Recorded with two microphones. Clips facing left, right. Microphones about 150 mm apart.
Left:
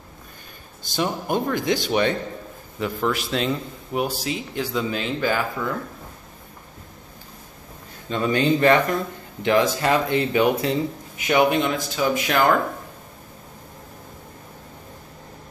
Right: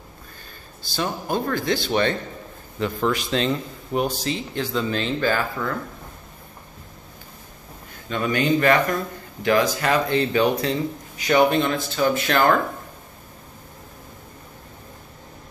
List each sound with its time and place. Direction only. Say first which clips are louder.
0.8 s a man's voice: left 2 dB; 15° left (ahead or behind)
8.1 s a man's voice: left 1 dB; 30° left (ahead or behind); by 12.5 s 10° left (ahead or behind)